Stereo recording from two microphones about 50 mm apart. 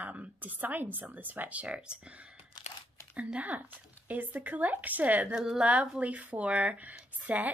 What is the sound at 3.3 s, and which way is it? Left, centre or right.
A woman's voice, right.